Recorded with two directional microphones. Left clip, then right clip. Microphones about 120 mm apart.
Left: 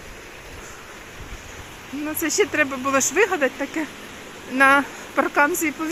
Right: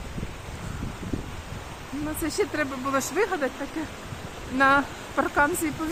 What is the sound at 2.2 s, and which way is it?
Speech, 15° left (ahead or behind).